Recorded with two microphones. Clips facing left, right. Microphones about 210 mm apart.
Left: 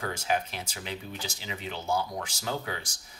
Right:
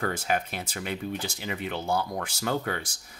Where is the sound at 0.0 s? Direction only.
55° right (ahead or behind).